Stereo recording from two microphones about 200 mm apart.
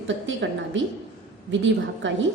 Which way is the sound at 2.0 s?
65° right (ahead or behind).